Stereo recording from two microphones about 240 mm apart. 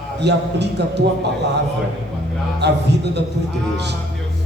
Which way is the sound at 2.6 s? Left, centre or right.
Right.